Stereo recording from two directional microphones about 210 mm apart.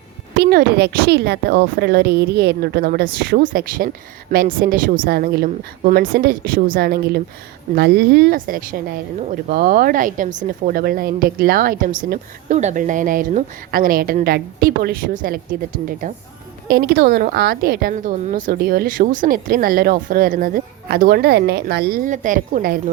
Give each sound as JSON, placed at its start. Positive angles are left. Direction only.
{"t": 0.3, "sound": "speech", "side_deg": -50}